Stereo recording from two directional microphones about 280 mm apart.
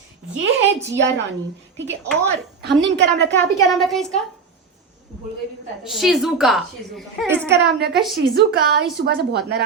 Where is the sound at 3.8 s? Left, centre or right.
Centre.